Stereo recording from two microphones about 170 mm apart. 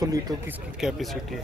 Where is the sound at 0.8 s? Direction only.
5° right (ahead or behind).